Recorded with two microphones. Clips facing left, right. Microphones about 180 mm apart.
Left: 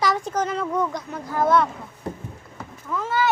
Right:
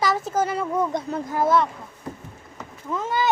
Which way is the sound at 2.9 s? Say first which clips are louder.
Left 1 dB; 20° right (ahead or behind).